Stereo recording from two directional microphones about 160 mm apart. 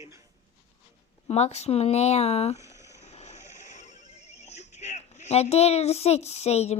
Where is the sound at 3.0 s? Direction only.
40° left (ahead or behind).